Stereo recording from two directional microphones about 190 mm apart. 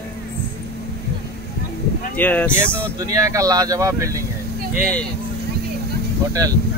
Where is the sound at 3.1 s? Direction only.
20° right (ahead or behind).